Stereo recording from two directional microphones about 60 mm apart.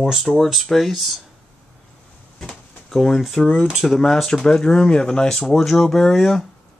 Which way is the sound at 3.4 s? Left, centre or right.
Left.